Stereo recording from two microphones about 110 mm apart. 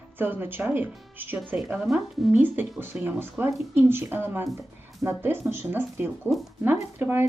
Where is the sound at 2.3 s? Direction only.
15° right (ahead or behind).